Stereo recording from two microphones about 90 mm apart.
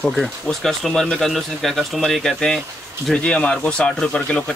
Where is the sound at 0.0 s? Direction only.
5° left (ahead or behind).